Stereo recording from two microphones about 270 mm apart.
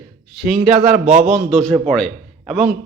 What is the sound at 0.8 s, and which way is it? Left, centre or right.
Speech, right.